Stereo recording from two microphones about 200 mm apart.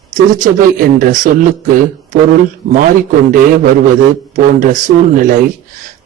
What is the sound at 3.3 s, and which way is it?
Speech, 45° right (ahead or behind).